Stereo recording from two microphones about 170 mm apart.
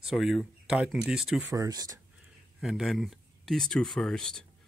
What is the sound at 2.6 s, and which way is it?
Speech, centre (ahead or behind).